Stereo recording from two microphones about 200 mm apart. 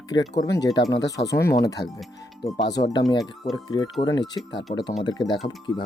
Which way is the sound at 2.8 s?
20° left (ahead or behind).